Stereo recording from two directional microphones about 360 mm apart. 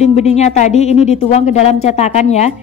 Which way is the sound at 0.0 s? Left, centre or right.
Centre.